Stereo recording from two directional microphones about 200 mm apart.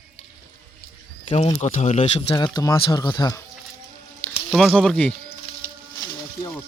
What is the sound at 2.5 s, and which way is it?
Speech, 20° left (ahead or behind).